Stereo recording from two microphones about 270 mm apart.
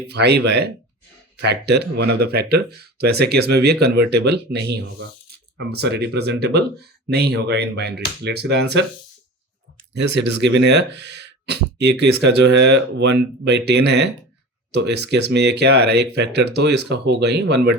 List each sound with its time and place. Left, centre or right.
0.1 s speech: right
9.9 s speech: right